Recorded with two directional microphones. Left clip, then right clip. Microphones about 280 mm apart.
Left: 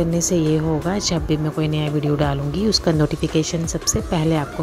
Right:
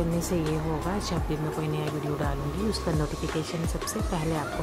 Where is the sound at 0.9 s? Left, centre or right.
Left.